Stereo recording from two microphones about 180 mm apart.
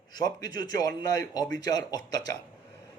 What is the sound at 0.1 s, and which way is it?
A man's voice, 20° left (ahead or behind).